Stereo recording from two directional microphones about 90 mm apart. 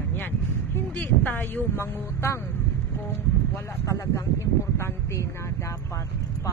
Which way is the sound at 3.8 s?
35° left (ahead or behind).